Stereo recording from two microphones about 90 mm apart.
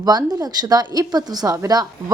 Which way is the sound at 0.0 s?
50° right (ahead or behind).